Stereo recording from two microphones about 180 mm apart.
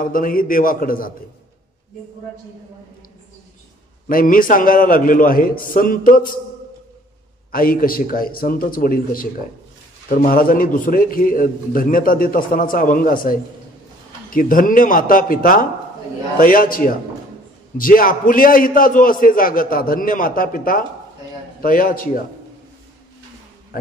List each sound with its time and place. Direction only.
0.0 s a man's voice: 50° left (ahead or behind)
4.1 s a man's voice: 50° left (ahead or behind)
7.5 s a man's voice: 55° left (ahead or behind)
23.7 s speech: 50° left (ahead or behind)